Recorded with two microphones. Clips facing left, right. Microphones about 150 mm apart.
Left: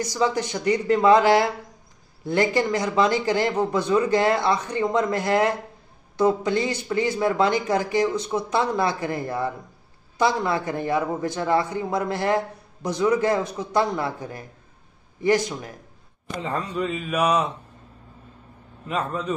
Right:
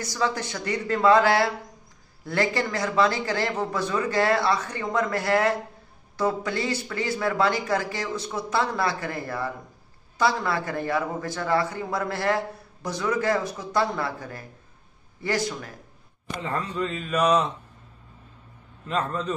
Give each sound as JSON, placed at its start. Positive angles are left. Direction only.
{"t": 0.0, "sound": "speech", "side_deg": 20}
{"t": 18.9, "sound": "speech", "side_deg": 10}